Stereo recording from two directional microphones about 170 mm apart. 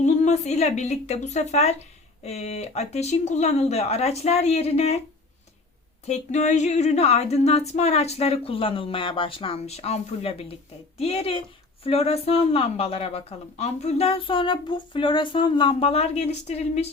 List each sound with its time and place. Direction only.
0.0 s speech: 40° left (ahead or behind)
6.1 s speech: 45° left (ahead or behind)